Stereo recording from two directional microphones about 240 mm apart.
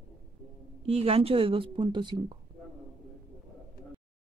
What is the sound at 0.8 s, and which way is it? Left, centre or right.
A woman's voice, right.